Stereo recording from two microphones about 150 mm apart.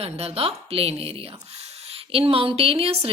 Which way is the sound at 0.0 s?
40° right (ahead or behind).